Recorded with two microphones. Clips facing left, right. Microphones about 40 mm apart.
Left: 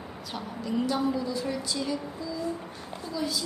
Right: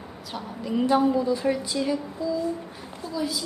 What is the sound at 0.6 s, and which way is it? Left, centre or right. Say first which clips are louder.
A woman's voice: right 6 dB; right.